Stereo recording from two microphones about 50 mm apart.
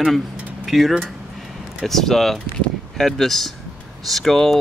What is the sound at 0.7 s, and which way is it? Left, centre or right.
Speech, centre.